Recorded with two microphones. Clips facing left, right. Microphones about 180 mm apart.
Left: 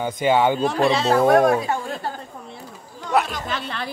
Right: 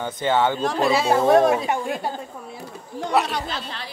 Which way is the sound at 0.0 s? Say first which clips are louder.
Left 3 dB; 10° left (ahead or behind).